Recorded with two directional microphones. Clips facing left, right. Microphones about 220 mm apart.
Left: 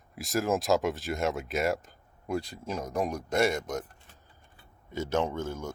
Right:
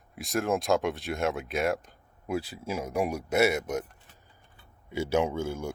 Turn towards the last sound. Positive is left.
turn(degrees=-10)  # may be behind; listen again after turning